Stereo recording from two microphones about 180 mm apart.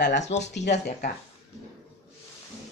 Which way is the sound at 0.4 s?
75° left (ahead or behind).